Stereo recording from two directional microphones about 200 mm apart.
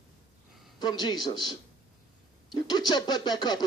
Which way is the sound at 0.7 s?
20° left (ahead or behind).